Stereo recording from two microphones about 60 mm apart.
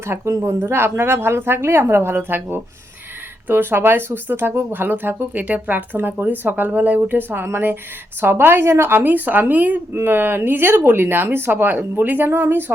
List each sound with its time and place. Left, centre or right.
0.3 s speech: right
9.9 s speech: right